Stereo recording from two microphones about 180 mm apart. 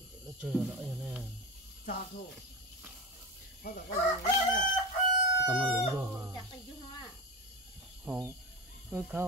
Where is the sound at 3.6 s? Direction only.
55° left (ahead or behind).